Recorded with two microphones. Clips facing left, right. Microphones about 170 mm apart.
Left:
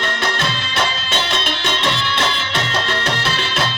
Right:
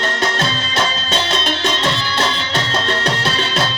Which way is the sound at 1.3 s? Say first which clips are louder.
Right 3 dB; 35° right (ahead or behind).